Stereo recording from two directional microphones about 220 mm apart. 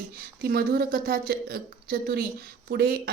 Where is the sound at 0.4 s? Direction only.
45° right (ahead or behind).